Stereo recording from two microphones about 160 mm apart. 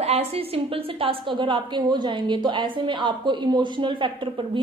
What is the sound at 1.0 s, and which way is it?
A woman's voice, 30° right (ahead or behind).